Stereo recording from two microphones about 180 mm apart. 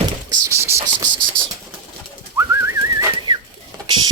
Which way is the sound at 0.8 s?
25° right (ahead or behind).